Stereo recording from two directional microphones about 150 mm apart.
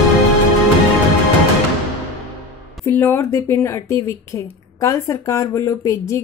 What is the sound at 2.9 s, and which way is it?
Speech, 15° left (ahead or behind).